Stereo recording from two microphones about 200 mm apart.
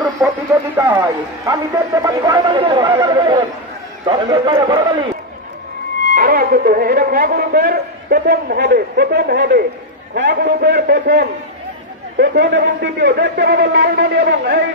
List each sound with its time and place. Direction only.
0.7 s a man's voice: 15° right (ahead or behind)
6.1 s a man's voice: 50° right (ahead or behind)